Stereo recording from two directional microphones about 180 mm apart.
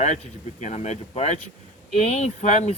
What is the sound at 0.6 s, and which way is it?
Speech, 40° left (ahead or behind).